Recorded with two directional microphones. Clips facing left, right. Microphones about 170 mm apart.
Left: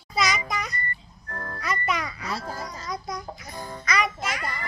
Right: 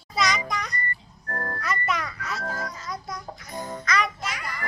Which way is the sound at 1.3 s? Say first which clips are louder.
Right 4 dB; 50° right (ahead or behind).